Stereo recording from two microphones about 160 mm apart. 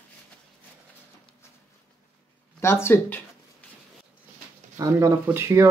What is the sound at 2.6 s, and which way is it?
Speech, 15° left (ahead or behind).